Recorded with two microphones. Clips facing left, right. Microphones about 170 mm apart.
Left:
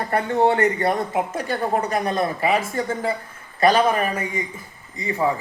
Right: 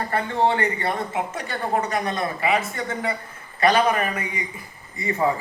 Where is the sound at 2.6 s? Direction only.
35° left (ahead or behind).